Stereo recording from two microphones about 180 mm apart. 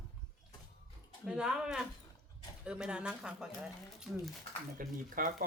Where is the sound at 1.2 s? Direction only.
5° right (ahead or behind).